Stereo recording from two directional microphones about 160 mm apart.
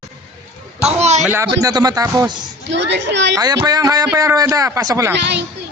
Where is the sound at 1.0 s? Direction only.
45° right (ahead or behind).